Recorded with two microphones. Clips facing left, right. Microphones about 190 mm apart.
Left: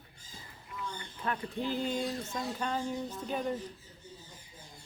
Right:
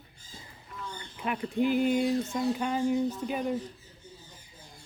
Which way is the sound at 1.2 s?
15° right (ahead or behind).